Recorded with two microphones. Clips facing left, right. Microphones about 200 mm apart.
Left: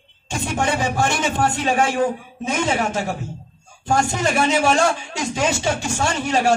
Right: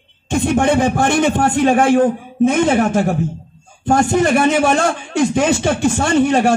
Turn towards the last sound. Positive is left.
turn(degrees=-55)  # may be behind; listen again after turning